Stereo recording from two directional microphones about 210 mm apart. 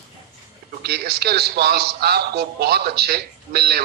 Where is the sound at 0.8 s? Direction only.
50° right (ahead or behind).